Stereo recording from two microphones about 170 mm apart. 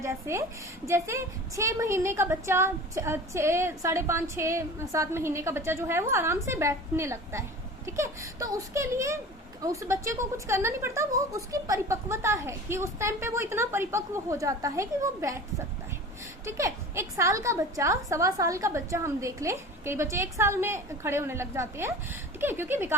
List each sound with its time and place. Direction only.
0.0 s a woman's voice: 15° right (ahead or behind)